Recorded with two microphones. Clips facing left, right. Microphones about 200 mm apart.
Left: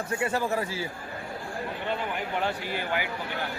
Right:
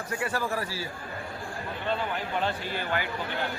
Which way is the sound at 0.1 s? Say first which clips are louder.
Left 2 dB; 25° left (ahead or behind).